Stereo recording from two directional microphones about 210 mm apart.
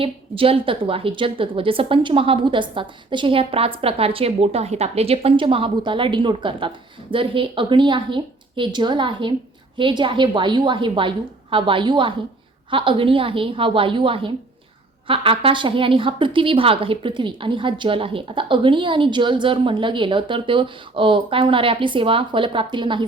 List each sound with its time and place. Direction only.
0.0 s a woman's voice: 25° right (ahead or behind)